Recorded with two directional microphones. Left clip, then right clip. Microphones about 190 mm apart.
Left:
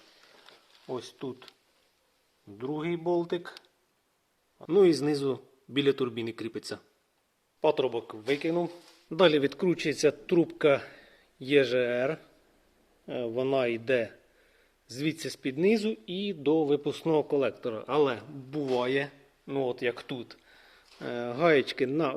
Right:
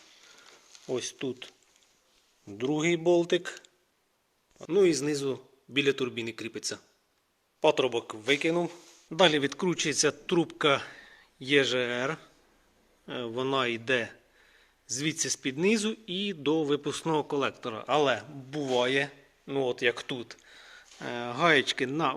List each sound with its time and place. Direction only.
0.9 s speech: 20° right (ahead or behind)
2.6 s speech: 25° right (ahead or behind)
4.6 s a man's voice: 15° left (ahead or behind)
7.6 s a man's voice: centre (ahead or behind)